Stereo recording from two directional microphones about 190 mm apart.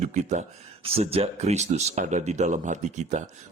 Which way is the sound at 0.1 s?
35° right (ahead or behind).